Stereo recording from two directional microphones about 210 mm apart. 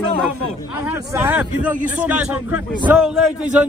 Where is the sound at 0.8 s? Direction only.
10° right (ahead or behind).